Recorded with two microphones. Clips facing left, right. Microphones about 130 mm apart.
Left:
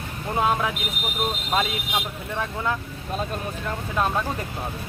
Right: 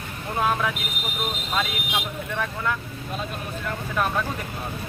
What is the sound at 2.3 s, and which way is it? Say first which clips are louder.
Speech: left 1 dB; 25° left (ahead or behind).